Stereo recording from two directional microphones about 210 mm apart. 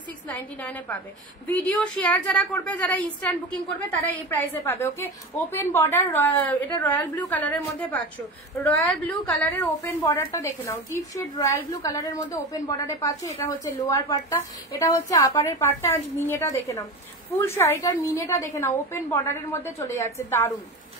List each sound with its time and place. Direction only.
0.3 s a woman's voice: 5° left (ahead or behind)